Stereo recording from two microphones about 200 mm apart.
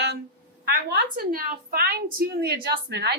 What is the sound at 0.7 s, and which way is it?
A woman's voice, 50° right (ahead or behind).